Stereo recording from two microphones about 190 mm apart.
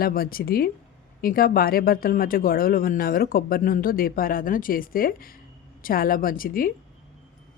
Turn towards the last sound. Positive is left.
turn(degrees=50)  # may be behind; listen again after turning